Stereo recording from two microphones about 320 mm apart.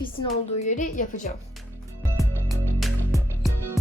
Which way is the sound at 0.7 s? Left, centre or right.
Left.